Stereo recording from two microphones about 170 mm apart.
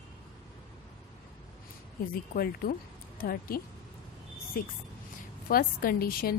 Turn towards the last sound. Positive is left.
turn(degrees=60)  # may be behind; listen again after turning